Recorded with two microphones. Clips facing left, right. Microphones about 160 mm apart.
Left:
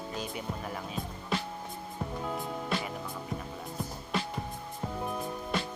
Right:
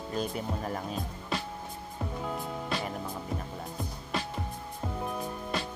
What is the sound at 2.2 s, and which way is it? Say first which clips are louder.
Music: even; centre (ahead or behind).